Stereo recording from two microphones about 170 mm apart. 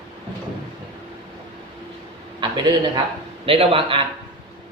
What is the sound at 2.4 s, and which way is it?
A man's voice, 25° right (ahead or behind).